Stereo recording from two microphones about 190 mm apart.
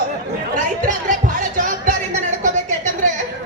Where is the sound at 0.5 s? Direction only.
40° right (ahead or behind).